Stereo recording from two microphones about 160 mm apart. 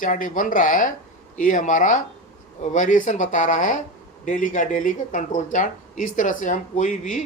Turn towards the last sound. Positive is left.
turn(degrees=50)  # may be behind; listen again after turning